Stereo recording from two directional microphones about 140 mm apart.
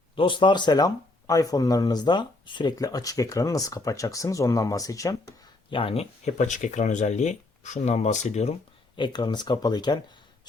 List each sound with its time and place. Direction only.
0.2 s speech: 35° left (ahead or behind)
5.7 s speech: 45° left (ahead or behind)
9.0 s speech: 35° left (ahead or behind)